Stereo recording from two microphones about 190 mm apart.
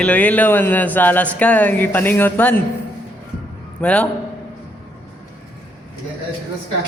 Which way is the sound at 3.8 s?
5° left (ahead or behind).